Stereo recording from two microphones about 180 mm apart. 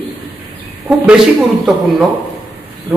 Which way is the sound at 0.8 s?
5° right (ahead or behind).